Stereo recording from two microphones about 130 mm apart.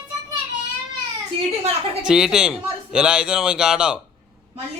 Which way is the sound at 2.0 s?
5° right (ahead or behind).